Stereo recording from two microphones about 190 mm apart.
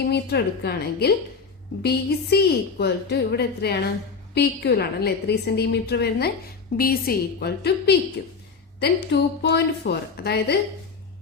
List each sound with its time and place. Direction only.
0.1 s a woman's voice: 60° left (ahead or behind)